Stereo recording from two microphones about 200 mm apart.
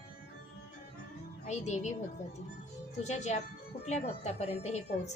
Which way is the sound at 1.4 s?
35° left (ahead or behind).